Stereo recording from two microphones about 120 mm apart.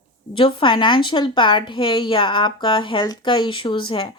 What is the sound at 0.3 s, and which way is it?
Speech, 45° left (ahead or behind).